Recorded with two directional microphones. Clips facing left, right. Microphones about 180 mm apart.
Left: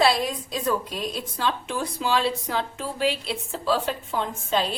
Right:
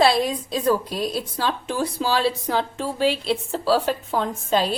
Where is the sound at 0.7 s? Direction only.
35° right (ahead or behind).